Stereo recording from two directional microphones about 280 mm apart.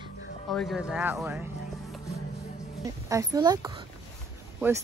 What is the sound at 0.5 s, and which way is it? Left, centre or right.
Speech, centre.